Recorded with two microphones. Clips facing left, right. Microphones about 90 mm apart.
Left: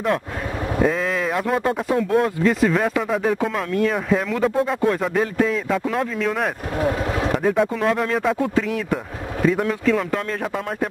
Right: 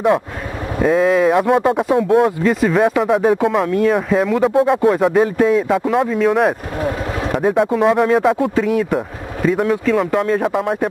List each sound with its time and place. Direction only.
0.8 s speech: 10° right (ahead or behind)
6.8 s a sound: 25° right (ahead or behind)
7.3 s speech: 10° right (ahead or behind)